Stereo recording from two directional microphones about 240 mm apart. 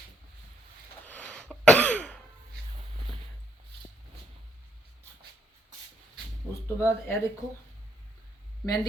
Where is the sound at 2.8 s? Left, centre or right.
Right.